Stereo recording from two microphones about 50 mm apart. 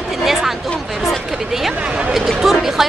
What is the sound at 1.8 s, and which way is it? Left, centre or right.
Speech, right.